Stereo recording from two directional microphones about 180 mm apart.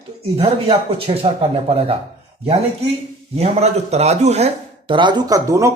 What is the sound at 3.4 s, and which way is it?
A man's voice, 35° right (ahead or behind).